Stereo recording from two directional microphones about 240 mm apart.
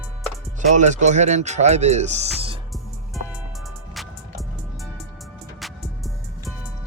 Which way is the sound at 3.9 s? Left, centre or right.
Centre.